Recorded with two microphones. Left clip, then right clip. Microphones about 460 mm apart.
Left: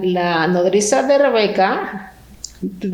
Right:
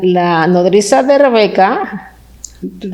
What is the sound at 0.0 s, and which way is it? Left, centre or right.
A woman's voice, right.